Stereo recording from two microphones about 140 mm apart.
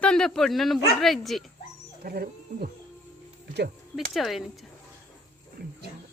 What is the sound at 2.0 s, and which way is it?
Speech, 90° right.